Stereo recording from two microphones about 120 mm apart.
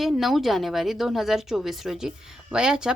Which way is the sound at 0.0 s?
Centre (ahead or behind).